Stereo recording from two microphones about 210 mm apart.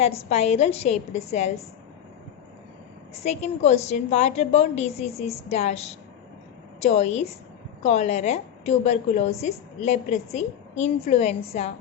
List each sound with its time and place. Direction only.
0.2 s a woman's voice: 30° left (ahead or behind)
3.2 s a woman's voice: 30° left (ahead or behind)